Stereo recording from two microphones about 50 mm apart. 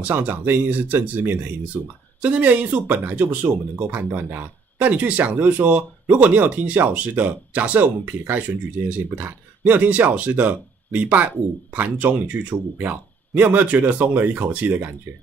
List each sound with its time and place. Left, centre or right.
0.0 s speech: right
3.4 s speech: right